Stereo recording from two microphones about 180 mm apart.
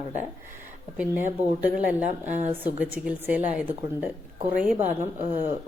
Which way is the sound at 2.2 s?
40° right (ahead or behind).